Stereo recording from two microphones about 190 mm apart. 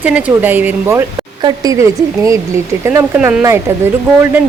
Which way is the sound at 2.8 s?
10° right (ahead or behind).